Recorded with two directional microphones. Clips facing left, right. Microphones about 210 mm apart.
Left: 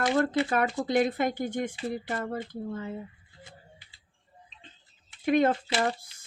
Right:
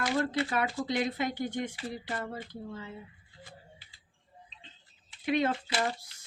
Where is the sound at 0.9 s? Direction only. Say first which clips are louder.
Left 5 dB; 50° left (ahead or behind).